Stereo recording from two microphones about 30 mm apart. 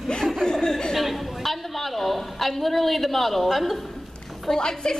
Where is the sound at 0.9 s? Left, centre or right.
Centre.